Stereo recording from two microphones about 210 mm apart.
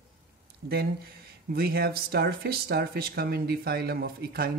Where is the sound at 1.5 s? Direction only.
45° right (ahead or behind).